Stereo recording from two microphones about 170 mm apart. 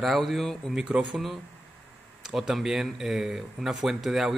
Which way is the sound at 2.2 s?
Centre (ahead or behind).